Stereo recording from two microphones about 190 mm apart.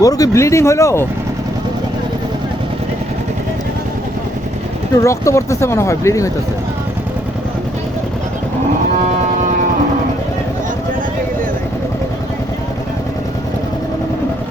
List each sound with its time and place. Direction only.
0.0 s speech: 20° left (ahead or behind)
5.0 s speech: 15° left (ahead or behind)